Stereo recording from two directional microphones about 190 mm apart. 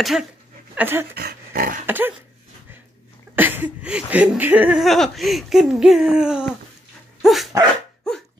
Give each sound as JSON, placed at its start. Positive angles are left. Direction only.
{"t": 0.0, "sound": "speech", "side_deg": -5}
{"t": 1.1, "sound": "dog", "side_deg": -55}
{"t": 1.9, "sound": "a sound", "side_deg": -10}
{"t": 3.3, "sound": "speech", "side_deg": -10}
{"t": 7.2, "sound": "dog", "side_deg": 0}